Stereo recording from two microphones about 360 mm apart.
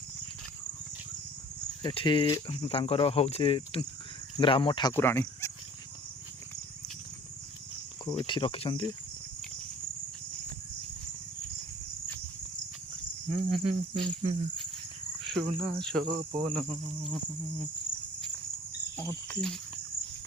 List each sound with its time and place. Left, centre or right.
1.8 s speech: centre
8.0 s speech: centre
13.7 s cricket: centre
15.2 s cricket: centre
18.9 s cricket: centre